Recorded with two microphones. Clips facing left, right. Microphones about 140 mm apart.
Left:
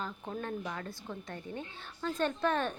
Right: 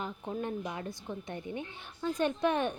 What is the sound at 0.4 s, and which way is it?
A woman's voice, 15° right (ahead or behind).